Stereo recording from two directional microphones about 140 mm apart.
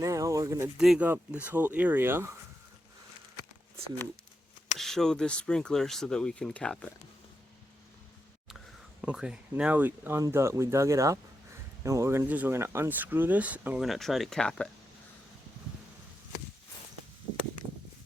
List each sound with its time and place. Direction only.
0.0 s a sound: 25° right (ahead or behind)
0.8 s speech: 5° right (ahead or behind)
4.8 s speech: 5° left (ahead or behind)
9.0 s speech: 5° right (ahead or behind)